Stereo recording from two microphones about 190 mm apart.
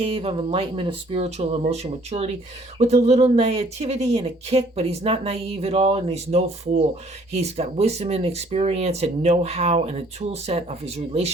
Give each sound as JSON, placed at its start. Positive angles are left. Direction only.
{"t": 0.0, "sound": "speech", "side_deg": -30}